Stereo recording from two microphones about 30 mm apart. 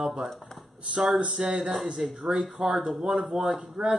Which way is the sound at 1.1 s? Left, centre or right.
Right.